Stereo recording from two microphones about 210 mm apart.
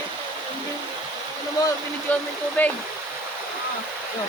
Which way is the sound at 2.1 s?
5° left (ahead or behind).